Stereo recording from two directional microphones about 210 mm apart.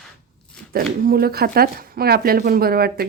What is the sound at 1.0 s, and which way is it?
A woman's voice, 45° right (ahead or behind).